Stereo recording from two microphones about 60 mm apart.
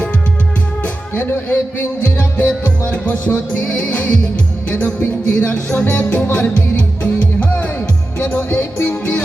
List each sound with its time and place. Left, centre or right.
1.1 s a man's voice: left
2.1 s music: left
8.4 s music: left